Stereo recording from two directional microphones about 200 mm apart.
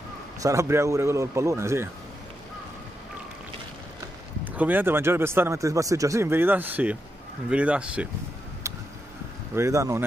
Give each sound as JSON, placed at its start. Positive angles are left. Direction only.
{"t": 0.4, "sound": "speech", "side_deg": -15}
{"t": 4.5, "sound": "speech", "side_deg": -10}
{"t": 9.6, "sound": "speech", "side_deg": -15}